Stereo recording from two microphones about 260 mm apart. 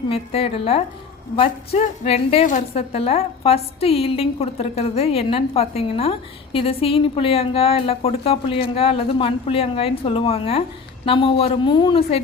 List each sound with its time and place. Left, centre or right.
0.1 s a woman's voice: left